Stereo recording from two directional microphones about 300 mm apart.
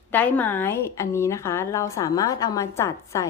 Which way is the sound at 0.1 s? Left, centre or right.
Centre.